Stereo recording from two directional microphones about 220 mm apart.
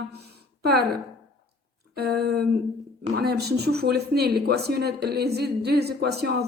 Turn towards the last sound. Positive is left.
turn(degrees=-45)  # may be behind; listen again after turning